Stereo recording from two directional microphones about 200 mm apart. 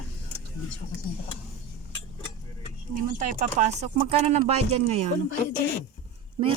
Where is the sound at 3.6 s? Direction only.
35° right (ahead or behind).